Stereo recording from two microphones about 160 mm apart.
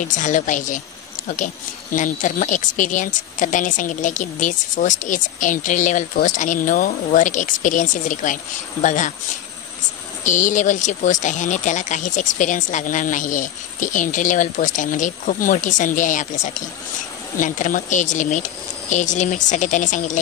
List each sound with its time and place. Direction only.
0.0 s speech: 50° left (ahead or behind)
10.2 s speech: 50° left (ahead or behind)